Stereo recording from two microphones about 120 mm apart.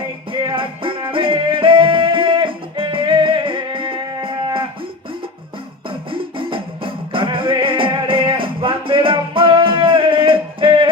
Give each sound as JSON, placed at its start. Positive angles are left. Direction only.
{"t": 0.3, "sound": "music", "side_deg": -45}
{"t": 5.9, "sound": "music", "side_deg": -45}